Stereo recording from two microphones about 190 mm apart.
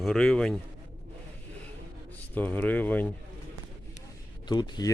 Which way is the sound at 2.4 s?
10° left (ahead or behind).